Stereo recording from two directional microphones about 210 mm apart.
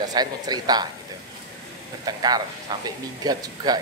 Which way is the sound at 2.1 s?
20° right (ahead or behind).